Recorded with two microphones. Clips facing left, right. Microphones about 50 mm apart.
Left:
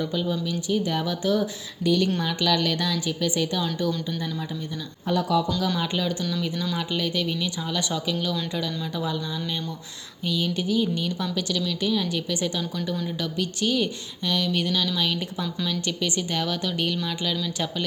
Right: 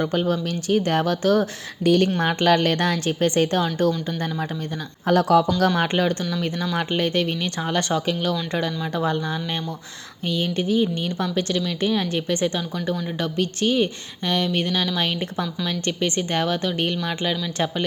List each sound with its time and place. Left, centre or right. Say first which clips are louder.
0.0 s speech: right 4 dB; right
2.0 s a woman's voice: right 5 dB; right
5.0 s speech: right 6 dB; right
5.5 s a woman's voice: right 6 dB; right
10.2 s a woman's voice: right 3 dB; right